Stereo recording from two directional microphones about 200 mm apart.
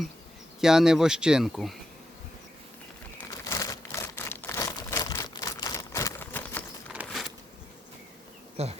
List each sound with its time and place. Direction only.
0.6 s speech: 5° right (ahead or behind)
3.4 s crumpling: 15° left (ahead or behind)
6.9 s a sound: 5° right (ahead or behind)
8.6 s bee: 30° right (ahead or behind)